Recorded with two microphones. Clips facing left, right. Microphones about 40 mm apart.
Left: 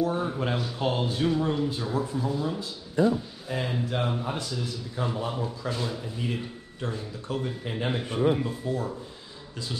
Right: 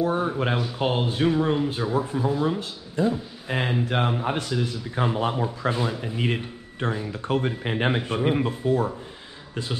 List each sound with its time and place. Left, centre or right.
0.0 s speech: right
3.4 s a man's voice: right
5.9 s a man's voice: right